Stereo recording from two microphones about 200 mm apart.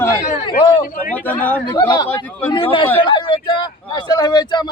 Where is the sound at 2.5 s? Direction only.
25° left (ahead or behind).